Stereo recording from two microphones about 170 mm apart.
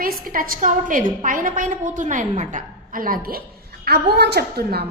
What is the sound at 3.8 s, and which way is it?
A woman's voice, 70° right (ahead or behind).